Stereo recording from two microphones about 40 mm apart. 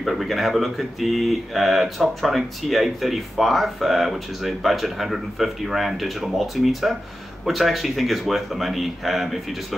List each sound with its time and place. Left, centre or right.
0.0 s speech: centre